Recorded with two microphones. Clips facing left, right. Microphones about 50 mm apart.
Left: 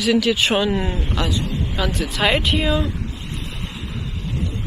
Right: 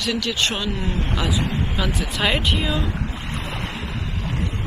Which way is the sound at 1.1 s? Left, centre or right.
Centre.